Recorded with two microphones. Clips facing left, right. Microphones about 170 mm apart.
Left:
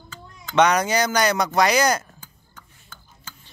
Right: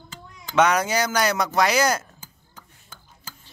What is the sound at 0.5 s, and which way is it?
Speech, 5° right (ahead or behind).